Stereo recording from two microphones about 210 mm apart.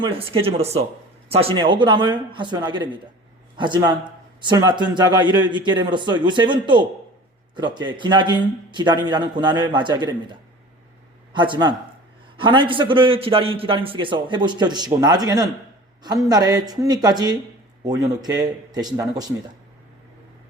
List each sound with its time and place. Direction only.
0.0 s a man's voice: 25° right (ahead or behind)
11.3 s a man's voice: 20° right (ahead or behind)